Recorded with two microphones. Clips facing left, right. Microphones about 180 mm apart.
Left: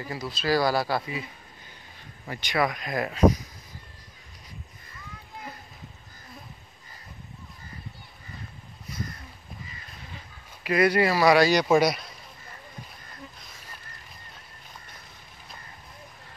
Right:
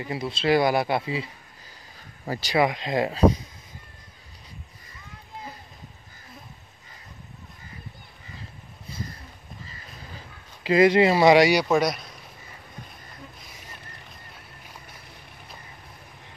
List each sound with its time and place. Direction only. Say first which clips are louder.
0.0 s speech: right 4 dB; 25° right (ahead or behind)
2.6 s speech: right 3 dB; 25° right (ahead or behind)
8.9 s boat: left 1 dB; 30° right (ahead or behind)
10.6 s speech: right 4 dB; 25° right (ahead or behind)
11.6 s speech: left 1 dB; 5° left (ahead or behind)